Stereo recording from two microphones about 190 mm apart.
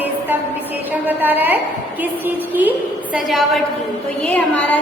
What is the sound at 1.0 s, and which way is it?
A woman's voice, 10° right (ahead or behind).